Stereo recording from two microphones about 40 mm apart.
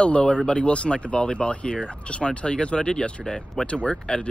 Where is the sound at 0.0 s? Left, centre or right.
Left.